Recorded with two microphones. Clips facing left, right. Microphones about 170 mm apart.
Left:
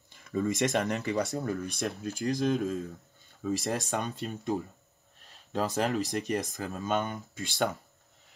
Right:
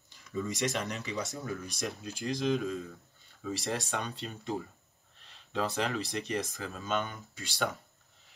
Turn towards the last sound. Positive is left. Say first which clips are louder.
# left 5 dB
turn(degrees=45)  # may be behind; listen again after turning